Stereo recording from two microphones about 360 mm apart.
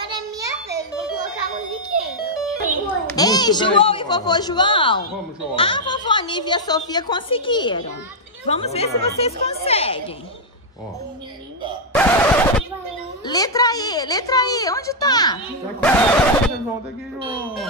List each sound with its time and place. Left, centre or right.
0.1 s music: centre
2.3 s music: centre
3.2 s a woman's voice: centre
11.9 s a sound: centre
13.2 s a woman's voice: centre
15.8 s music: centre